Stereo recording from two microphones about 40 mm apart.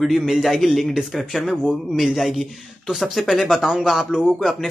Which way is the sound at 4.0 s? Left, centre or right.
Centre.